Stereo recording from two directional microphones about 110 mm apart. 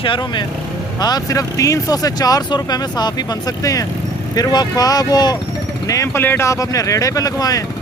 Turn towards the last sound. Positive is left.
turn(degrees=35)  # may be behind; listen again after turning